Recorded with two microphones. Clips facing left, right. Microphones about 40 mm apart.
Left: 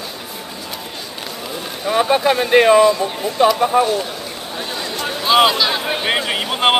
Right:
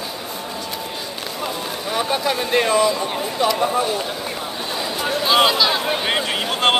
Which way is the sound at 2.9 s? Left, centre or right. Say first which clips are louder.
Left 4 dB; centre.